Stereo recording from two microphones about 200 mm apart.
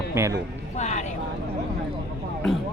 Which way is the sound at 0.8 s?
35° left (ahead or behind).